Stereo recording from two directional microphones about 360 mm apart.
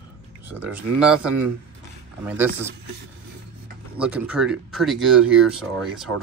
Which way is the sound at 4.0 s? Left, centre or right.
Centre.